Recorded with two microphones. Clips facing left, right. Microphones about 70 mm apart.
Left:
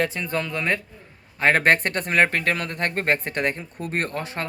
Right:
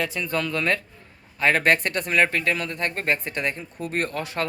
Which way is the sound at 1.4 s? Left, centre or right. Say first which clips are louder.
Left 2 dB; left.